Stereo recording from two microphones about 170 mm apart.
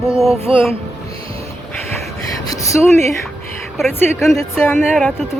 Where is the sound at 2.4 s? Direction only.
20° left (ahead or behind).